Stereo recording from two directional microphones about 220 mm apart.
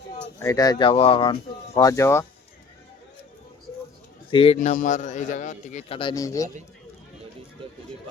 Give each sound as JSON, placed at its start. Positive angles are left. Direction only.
{"t": 0.3, "sound": "speech", "side_deg": 15}
{"t": 4.3, "sound": "a man's voice", "side_deg": 25}